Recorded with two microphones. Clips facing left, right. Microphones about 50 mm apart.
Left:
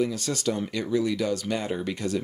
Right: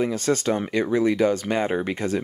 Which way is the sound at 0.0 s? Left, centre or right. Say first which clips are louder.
Right 4 dB; right.